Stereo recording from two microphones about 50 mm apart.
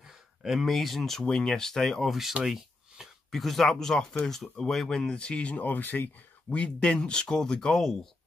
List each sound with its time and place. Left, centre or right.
0.4 s speech: centre
2.4 s a sound: centre
3.3 s speech: centre; by 6.0 s left
6.5 s speech: left; by 8.1 s centre